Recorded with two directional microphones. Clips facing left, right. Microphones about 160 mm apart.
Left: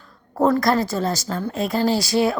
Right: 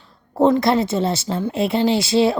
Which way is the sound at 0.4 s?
25° right (ahead or behind).